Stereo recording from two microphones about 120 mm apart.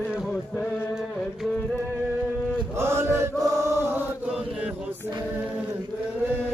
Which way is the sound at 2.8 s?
20° right (ahead or behind).